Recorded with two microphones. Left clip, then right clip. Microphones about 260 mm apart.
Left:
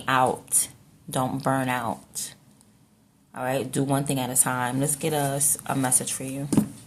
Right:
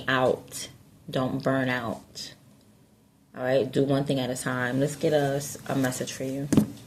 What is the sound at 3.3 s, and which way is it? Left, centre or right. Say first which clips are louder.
Speech: right 3 dB; centre.